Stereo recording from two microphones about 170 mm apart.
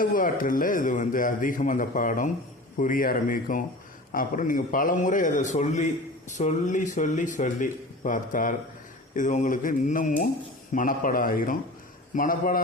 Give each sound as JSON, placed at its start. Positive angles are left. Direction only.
{"t": 0.0, "sound": "a man's voice", "side_deg": 55}